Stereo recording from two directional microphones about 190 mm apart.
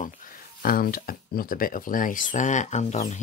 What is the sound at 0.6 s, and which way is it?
Speech, 50° left (ahead or behind).